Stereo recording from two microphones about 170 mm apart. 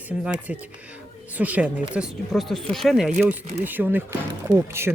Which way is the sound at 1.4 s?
10° right (ahead or behind).